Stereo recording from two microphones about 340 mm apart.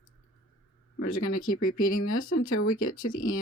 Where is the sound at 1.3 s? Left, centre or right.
Left.